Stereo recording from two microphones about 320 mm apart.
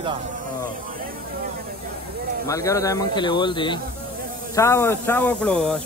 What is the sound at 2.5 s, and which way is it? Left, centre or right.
Speech, centre.